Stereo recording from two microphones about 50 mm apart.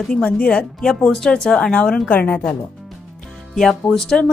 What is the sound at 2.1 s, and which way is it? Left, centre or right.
Speech, left.